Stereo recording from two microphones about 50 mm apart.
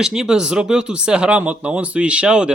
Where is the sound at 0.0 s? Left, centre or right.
Centre.